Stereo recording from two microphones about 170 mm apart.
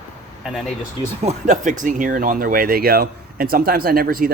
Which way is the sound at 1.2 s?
50° right (ahead or behind).